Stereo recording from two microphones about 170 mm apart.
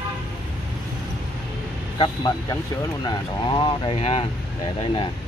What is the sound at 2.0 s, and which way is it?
Speech, 25° left (ahead or behind).